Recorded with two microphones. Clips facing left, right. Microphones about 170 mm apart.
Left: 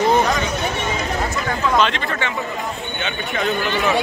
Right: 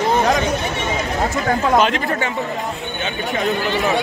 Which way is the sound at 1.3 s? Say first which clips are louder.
Right 5 dB; 45° right (ahead or behind).